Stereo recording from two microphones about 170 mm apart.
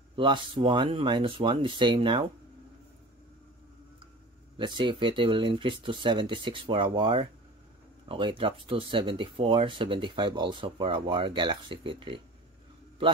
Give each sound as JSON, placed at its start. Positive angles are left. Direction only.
{"t": 0.1, "sound": "speech", "side_deg": -30}
{"t": 4.6, "sound": "speech", "side_deg": -25}